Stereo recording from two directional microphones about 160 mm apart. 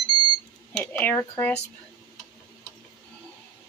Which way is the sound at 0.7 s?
10° left (ahead or behind).